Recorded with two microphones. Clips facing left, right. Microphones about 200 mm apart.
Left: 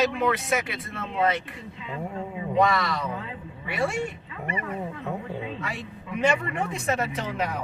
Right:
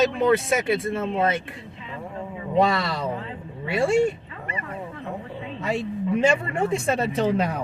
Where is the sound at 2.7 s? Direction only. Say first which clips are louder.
Right 1 dB; 30° right (ahead or behind).